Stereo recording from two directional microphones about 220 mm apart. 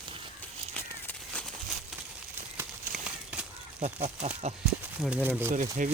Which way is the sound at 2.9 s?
5° right (ahead or behind).